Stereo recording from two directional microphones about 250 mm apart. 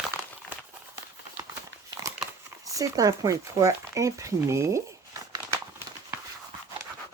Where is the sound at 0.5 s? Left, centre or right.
Centre.